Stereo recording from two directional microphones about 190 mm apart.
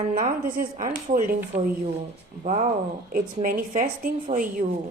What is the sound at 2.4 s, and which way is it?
A woman's voice, 40° right (ahead or behind).